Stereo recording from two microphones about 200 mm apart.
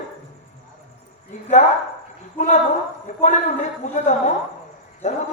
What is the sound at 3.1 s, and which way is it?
Speech, 35° left (ahead or behind).